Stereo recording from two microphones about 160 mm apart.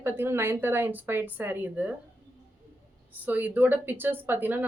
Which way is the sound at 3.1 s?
10° right (ahead or behind).